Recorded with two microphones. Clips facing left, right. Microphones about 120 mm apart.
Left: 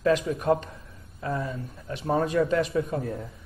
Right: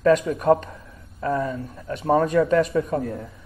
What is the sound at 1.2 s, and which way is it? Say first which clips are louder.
A man's voice: right 6 dB; 65° right (ahead or behind).